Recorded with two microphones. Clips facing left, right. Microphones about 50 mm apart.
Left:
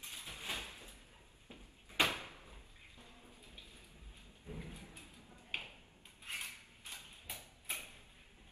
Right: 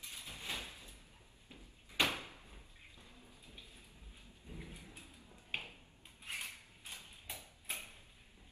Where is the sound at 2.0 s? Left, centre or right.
Left.